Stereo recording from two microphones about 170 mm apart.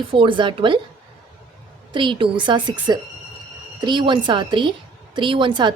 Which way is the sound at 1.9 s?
30° right (ahead or behind).